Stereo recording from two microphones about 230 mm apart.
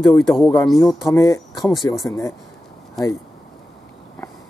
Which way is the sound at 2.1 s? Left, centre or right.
Centre.